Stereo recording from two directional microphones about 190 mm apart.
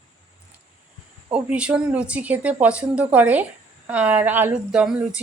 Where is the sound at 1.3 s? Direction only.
5° right (ahead or behind).